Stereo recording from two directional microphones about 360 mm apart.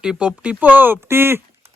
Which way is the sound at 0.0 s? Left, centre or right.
Centre.